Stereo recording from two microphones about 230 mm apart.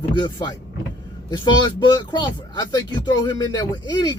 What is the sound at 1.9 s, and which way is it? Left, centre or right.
Speech, centre.